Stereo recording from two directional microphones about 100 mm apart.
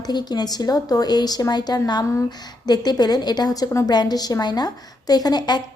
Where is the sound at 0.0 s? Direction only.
45° left (ahead or behind).